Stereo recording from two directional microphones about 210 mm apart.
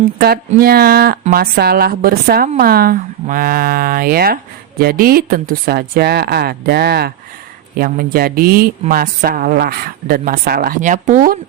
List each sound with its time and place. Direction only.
0.2 s speech: 45° right (ahead or behind)